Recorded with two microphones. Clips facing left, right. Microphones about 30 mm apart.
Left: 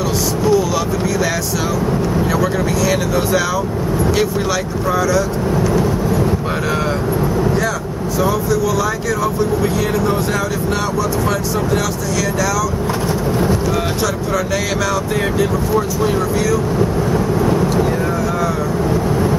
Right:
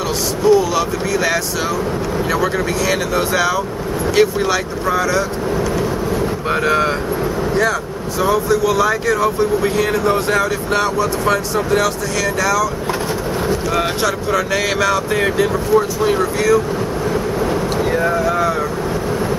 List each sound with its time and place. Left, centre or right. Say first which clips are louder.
0.5 s speech: right 3 dB; centre
8.2 s speech: right 2 dB; right
14.0 s speech: right 1 dB; centre
17.5 s vehicle: left 2 dB; centre